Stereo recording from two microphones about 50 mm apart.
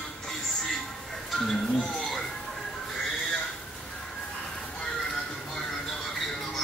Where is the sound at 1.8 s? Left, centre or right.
Centre.